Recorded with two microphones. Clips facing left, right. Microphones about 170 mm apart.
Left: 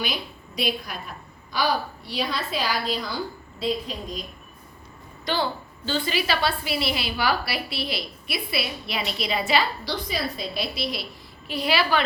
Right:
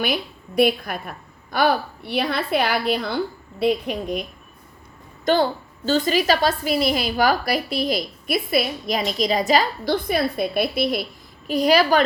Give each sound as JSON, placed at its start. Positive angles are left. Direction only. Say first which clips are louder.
{"t": 0.0, "sound": "a woman's voice", "louder": "right 6 dB", "side_deg": -55}
{"t": 5.2, "sound": "a woman's voice", "louder": "right 7 dB", "side_deg": -45}
{"t": 11.4, "sound": "a woman's voice", "louder": "right 7 dB", "side_deg": -45}